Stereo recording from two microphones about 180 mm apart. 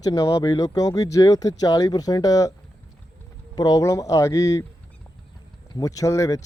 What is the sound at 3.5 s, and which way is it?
Speech, 20° left (ahead or behind).